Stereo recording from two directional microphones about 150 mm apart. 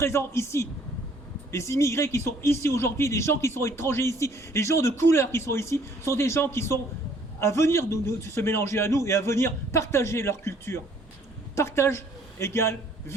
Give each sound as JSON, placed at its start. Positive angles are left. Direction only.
{"t": 0.0, "sound": "a man's voice", "side_deg": 15}